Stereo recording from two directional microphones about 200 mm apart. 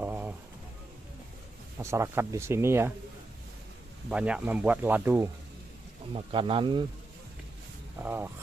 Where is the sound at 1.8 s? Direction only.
15° right (ahead or behind).